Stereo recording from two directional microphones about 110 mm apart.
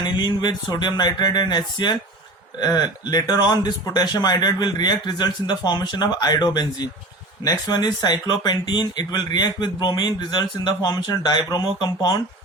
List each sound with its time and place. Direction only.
0.0 s speech: 40° left (ahead or behind)